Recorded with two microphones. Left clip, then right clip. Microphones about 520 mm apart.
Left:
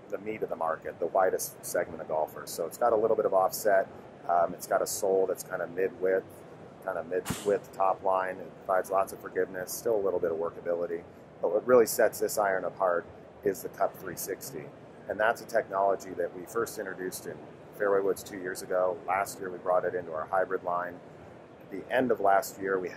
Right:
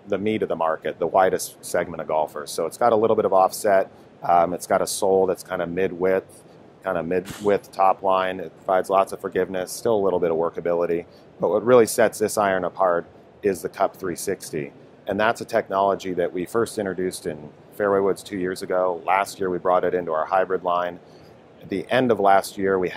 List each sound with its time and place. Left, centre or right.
0.1 s speech: right
21.9 s speech: right